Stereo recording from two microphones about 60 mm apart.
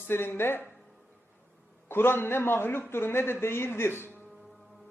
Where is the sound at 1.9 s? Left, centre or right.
Left.